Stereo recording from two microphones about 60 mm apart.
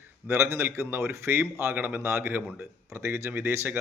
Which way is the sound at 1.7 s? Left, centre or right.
Right.